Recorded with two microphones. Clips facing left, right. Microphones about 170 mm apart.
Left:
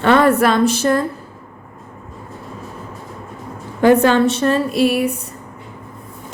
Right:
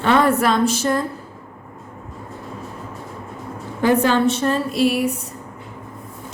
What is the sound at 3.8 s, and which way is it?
A woman's voice, 65° left (ahead or behind).